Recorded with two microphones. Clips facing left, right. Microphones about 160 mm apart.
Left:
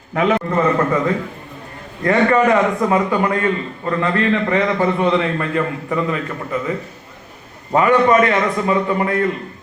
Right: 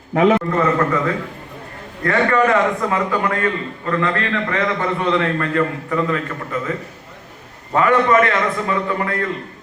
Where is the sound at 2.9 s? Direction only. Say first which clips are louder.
Left 3 dB; 25° left (ahead or behind).